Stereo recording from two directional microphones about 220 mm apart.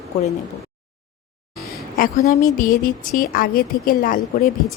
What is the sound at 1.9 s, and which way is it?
A woman's voice, 35° left (ahead or behind).